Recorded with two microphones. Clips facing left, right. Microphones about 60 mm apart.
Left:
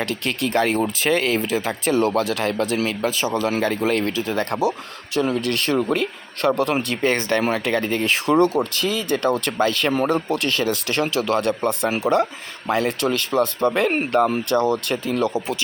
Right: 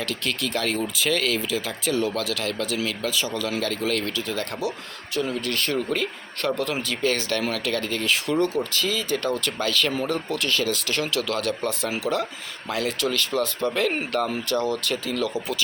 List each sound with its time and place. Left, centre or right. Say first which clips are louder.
0.0 s speech: left 4 dB; left
4.5 s speech: left 9 dB; left
5.1 s a man's voice: left 5 dB; left
8.0 s a man's voice: left 6 dB; left
8.7 s speech: left 3 dB; left